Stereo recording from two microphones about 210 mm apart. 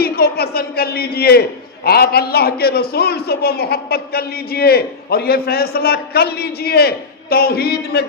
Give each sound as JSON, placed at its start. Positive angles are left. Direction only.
{"t": 0.0, "sound": "a man's voice", "side_deg": 50}